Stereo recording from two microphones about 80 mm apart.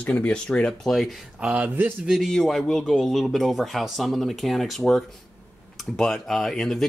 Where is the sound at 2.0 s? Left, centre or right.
Centre.